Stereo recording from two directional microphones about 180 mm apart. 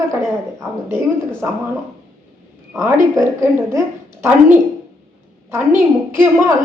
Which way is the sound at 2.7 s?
15° right (ahead or behind).